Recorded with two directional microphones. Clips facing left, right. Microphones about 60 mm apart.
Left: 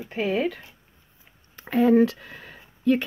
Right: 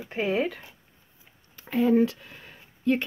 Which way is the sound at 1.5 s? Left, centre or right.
Left.